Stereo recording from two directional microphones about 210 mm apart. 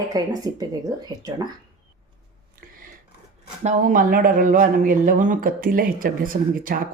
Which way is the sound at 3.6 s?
35° right (ahead or behind).